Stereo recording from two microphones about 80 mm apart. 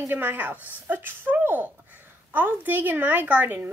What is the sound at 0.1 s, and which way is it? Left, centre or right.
Speech, right.